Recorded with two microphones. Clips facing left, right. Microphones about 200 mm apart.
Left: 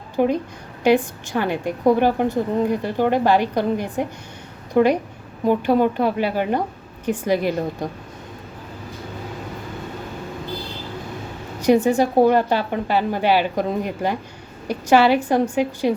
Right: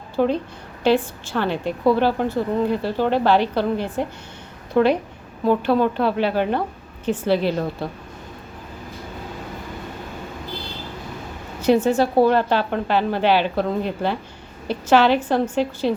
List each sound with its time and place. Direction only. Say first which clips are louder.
0.2 s a woman's voice: left 1 dB; 15° left (ahead or behind)
11.6 s a woman's voice: left 1 dB; 15° left (ahead or behind)